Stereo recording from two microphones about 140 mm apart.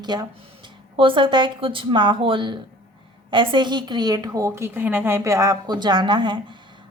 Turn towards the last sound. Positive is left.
turn(degrees=-35)  # may be behind; listen again after turning